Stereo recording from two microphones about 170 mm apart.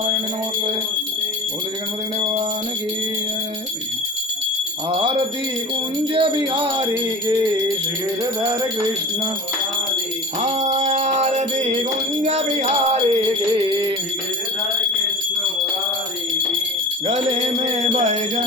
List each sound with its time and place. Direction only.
4.9 s a sound: 30° right (ahead or behind)
6.1 s jingle bell: 30° right (ahead or behind)
10.4 s music: 40° right (ahead or behind)
17.1 s jingle bell: 35° right (ahead or behind)